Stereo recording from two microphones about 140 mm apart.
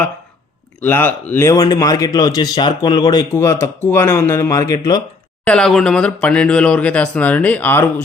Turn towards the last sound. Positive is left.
turn(degrees=15)  # may be behind; listen again after turning